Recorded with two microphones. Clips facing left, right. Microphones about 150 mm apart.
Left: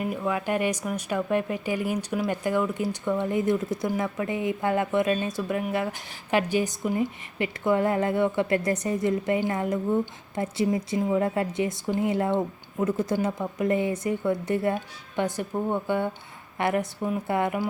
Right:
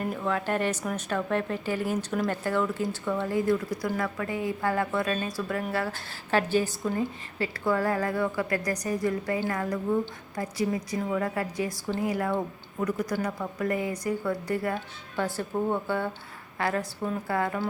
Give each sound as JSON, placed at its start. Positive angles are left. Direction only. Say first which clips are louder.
{"t": 0.0, "sound": "a woman's voice", "louder": "left 1 dB", "side_deg": 10}